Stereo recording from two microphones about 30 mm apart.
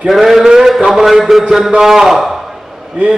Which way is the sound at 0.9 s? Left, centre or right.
Centre.